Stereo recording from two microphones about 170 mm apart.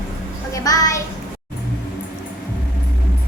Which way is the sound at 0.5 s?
20° left (ahead or behind).